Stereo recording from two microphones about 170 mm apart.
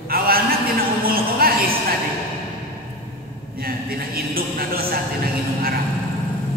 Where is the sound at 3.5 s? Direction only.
60° right (ahead or behind).